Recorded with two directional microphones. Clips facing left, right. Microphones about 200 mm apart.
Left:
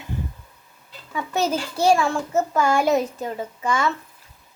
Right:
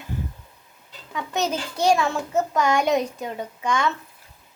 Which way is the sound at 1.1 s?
10° left (ahead or behind).